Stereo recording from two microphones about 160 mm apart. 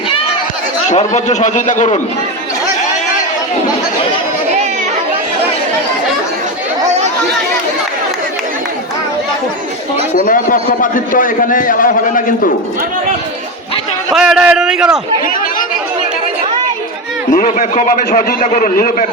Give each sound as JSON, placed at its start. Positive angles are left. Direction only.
{"t": 0.9, "sound": "a man's voice", "side_deg": 45}
{"t": 10.2, "sound": "a man's voice", "side_deg": 60}
{"t": 14.1, "sound": "a man's voice", "side_deg": -5}
{"t": 17.3, "sound": "a man's voice", "side_deg": 50}